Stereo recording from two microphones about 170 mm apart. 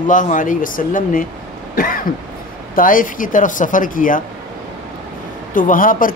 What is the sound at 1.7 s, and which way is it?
Cough, 55° left (ahead or behind).